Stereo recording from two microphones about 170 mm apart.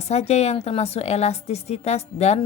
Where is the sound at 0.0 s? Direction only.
40° left (ahead or behind).